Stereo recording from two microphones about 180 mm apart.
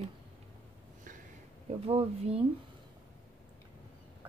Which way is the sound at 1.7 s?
35° right (ahead or behind).